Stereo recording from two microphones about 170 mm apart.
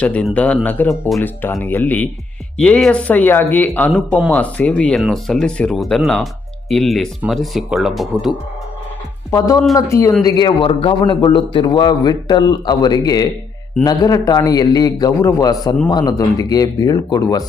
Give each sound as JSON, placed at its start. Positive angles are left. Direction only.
{"t": 0.0, "sound": "speech", "side_deg": 5}
{"t": 9.7, "sound": "a man's voice", "side_deg": 15}